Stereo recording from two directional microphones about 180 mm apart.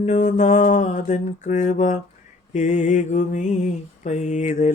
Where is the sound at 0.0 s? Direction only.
40° left (ahead or behind).